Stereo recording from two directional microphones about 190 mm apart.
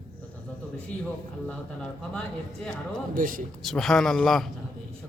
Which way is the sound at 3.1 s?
45° right (ahead or behind).